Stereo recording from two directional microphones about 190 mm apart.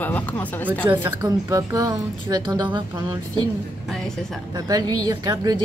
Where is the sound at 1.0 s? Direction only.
20° right (ahead or behind).